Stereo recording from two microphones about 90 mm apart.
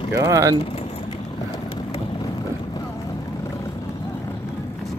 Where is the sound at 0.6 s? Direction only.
90° left.